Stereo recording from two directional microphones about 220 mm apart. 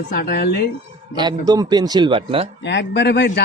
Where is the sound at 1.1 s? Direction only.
20° right (ahead or behind).